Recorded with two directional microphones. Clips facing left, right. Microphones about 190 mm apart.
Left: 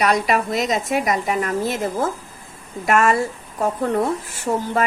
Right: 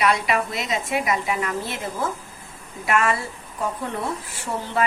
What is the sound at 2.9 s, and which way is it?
Speech, 45° left (ahead or behind).